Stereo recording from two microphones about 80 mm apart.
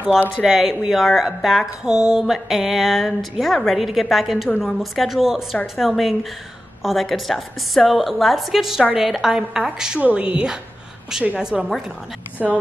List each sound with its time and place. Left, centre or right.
0.4 s a woman's voice: centre